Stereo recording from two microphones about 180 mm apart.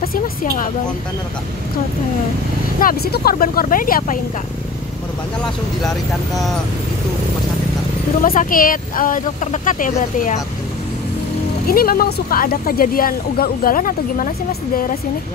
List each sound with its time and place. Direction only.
0.0 s a sound: 50° left (ahead or behind)
2.8 s speech: 55° left (ahead or behind)
6.3 s speech: centre (ahead or behind)
8.2 s speech: 50° left (ahead or behind)
11.6 s speech: 55° left (ahead or behind)